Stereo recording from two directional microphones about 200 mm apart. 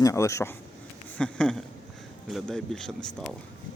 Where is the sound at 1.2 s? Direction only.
5° left (ahead or behind).